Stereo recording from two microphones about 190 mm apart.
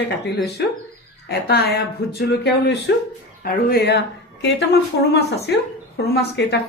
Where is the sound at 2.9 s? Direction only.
70° left (ahead or behind).